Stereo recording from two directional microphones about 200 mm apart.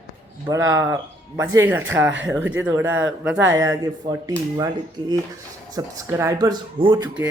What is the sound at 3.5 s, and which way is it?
Speech, 15° right (ahead or behind).